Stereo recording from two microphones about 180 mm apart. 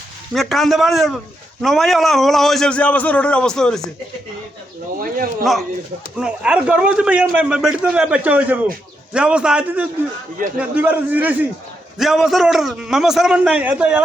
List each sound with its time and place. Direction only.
0.3 s a man's voice: centre (ahead or behind)
4.9 s speech: 55° right (ahead or behind)
6.1 s a man's voice: 5° right (ahead or behind)